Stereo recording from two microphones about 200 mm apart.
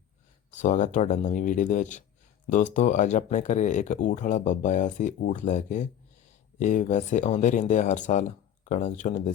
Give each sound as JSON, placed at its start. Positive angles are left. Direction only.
{"t": 0.5, "sound": "speech", "side_deg": 40}